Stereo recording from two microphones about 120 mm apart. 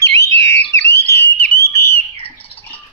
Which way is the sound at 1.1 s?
25° left (ahead or behind).